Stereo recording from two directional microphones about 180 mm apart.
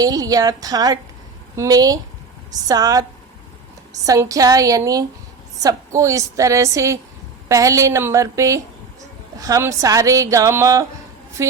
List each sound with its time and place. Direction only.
0.0 s a woman's voice: 20° right (ahead or behind)